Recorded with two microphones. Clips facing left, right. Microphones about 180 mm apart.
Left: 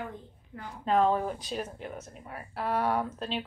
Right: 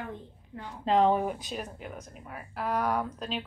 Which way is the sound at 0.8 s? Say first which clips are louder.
Right 1 dB; 20° right (ahead or behind).